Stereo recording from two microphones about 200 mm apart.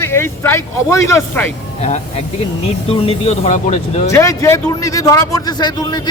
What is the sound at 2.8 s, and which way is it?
Speech, 30° left (ahead or behind).